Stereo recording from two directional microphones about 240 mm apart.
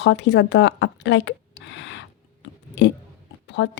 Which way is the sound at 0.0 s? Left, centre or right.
Left.